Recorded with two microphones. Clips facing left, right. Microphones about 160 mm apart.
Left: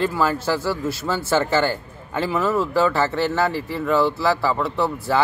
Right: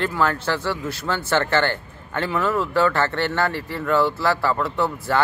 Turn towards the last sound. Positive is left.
turn(degrees=0)  # may be behind; listen again after turning